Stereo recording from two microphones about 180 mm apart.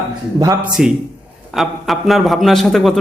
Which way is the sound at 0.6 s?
5° right (ahead or behind).